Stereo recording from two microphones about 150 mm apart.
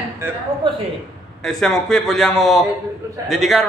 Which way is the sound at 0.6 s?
35° right (ahead or behind).